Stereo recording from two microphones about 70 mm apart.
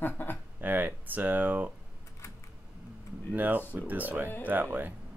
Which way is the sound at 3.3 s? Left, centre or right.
Right.